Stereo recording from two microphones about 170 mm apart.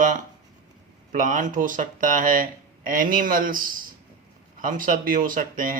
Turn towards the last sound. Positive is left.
turn(degrees=-55)  # may be behind; listen again after turning